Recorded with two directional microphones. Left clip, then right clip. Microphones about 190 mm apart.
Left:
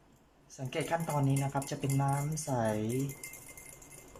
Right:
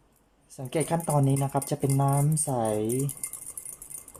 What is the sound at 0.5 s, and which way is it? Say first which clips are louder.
Speech: right 5 dB; 25° right (ahead or behind).